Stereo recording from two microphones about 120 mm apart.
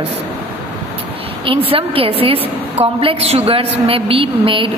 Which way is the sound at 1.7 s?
50° right (ahead or behind).